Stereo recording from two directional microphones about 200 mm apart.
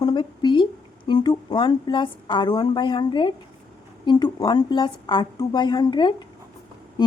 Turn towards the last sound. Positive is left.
turn(degrees=20)  # may be behind; listen again after turning